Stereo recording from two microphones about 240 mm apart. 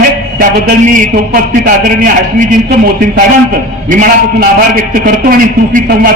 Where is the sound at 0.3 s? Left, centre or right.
Right.